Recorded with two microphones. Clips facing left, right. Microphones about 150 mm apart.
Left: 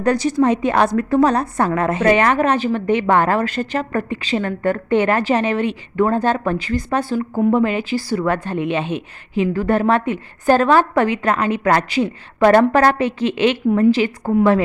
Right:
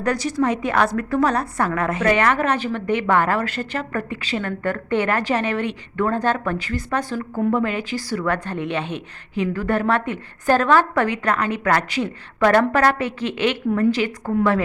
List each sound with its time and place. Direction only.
0.0 s a woman's voice: 25° left (ahead or behind)
4.6 s a woman's voice: 15° left (ahead or behind)